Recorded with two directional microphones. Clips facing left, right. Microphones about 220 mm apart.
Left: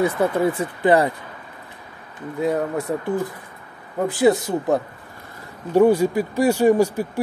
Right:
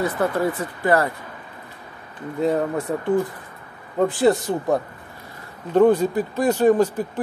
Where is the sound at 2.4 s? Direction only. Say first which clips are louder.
Right 1 dB; centre (ahead or behind).